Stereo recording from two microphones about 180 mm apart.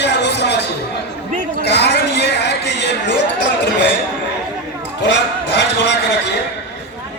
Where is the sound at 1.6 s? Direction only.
70° left (ahead or behind).